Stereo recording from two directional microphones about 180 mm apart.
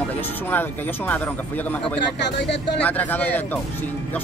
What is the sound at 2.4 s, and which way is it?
Speech, 70° left (ahead or behind).